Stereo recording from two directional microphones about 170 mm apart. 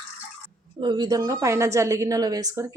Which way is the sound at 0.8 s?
25° right (ahead or behind).